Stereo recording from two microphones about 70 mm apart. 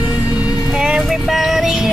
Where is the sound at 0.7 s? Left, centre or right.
Centre.